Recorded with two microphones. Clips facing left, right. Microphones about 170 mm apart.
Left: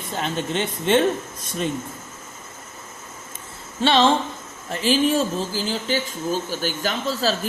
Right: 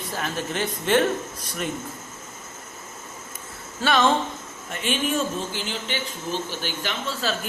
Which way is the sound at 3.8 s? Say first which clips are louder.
Left 3 dB; 25° left (ahead or behind).